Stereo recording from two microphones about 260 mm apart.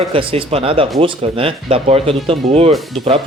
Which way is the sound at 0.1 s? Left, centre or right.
Right.